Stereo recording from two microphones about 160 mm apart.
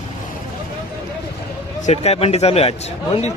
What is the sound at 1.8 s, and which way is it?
A man's voice, 40° left (ahead or behind).